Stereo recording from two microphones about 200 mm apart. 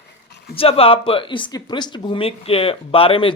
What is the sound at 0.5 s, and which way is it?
Speech, 30° left (ahead or behind).